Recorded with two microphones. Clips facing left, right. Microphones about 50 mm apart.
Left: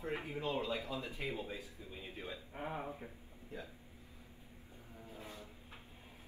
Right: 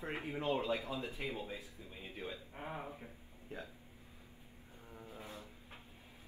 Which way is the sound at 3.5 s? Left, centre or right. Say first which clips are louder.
Right 1 dB; right.